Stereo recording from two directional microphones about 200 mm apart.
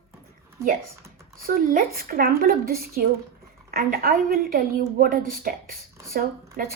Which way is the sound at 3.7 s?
45° right (ahead or behind).